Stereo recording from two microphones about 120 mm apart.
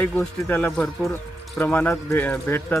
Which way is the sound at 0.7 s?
Centre (ahead or behind).